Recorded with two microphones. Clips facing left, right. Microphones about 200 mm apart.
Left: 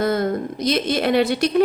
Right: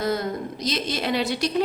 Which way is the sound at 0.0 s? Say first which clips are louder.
Left 5 dB; 55° left (ahead or behind).